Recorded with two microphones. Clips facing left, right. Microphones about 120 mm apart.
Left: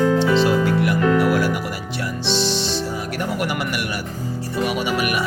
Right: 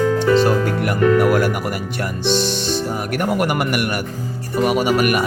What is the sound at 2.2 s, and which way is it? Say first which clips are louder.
Music: right 3 dB; 50° right (ahead or behind).